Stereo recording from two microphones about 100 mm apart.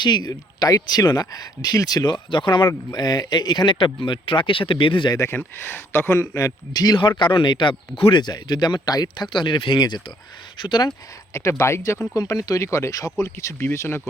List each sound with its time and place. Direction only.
0.0 s speech: 45° left (ahead or behind)
2.3 s speech: 55° left (ahead or behind)
2.9 s speech: 40° left (ahead or behind)
5.1 s speech: 25° left (ahead or behind)
6.2 s speech: 35° left (ahead or behind)
11.3 s speech: 30° left (ahead or behind)